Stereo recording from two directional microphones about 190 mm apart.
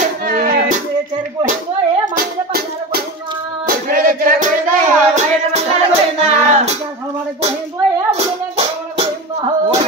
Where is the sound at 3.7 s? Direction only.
50° right (ahead or behind).